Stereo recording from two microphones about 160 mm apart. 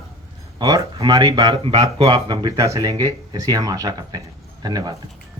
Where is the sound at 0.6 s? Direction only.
20° right (ahead or behind).